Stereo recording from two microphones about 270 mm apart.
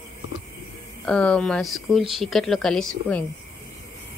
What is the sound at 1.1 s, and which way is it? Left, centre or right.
Speech, centre.